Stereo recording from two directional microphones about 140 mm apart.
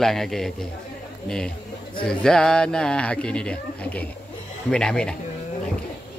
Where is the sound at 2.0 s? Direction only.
5° left (ahead or behind).